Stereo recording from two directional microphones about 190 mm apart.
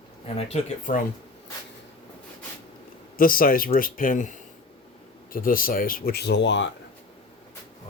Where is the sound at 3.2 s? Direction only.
50° left (ahead or behind); by 6.7 s 70° left (ahead or behind).